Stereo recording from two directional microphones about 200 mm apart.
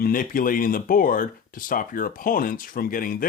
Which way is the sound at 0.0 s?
45° left (ahead or behind).